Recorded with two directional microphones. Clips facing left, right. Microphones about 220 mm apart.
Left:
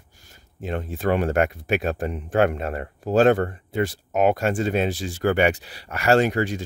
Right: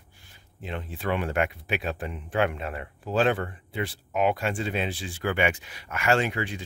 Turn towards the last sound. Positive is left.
turn(degrees=40)  # may be behind; listen again after turning